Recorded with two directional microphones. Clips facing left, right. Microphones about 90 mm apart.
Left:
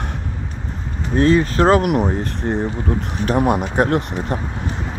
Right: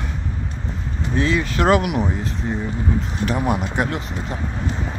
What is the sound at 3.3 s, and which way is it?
Speech, 40° left (ahead or behind).